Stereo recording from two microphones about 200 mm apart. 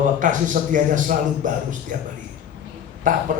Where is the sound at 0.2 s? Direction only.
40° right (ahead or behind).